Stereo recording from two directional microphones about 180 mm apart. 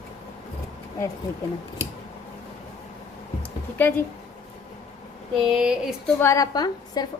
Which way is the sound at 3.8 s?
10° left (ahead or behind).